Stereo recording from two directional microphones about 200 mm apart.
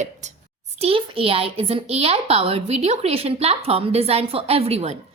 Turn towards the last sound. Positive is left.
turn(degrees=-30)  # may be behind; listen again after turning